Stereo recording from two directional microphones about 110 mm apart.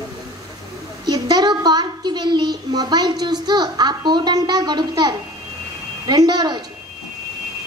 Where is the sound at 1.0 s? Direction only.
35° right (ahead or behind).